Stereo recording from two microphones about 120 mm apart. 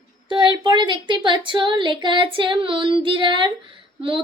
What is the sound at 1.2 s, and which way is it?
Female singing, 40° right (ahead or behind).